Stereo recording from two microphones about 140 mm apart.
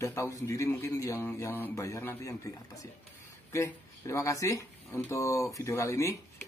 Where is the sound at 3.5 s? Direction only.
20° left (ahead or behind).